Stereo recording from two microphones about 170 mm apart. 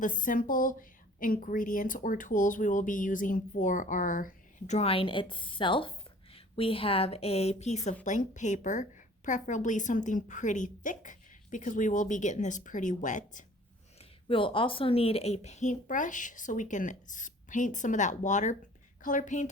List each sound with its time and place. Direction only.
0.0 s a woman's voice: 50° left (ahead or behind)
14.0 s a woman's voice: 30° left (ahead or behind); by 19.5 s 45° left (ahead or behind)